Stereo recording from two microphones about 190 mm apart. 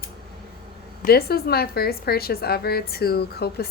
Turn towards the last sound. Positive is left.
turn(degrees=55)  # may be behind; listen again after turning